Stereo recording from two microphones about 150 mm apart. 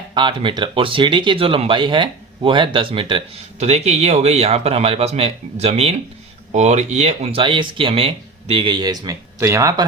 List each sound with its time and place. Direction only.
0.1 s speech: 35° right (ahead or behind)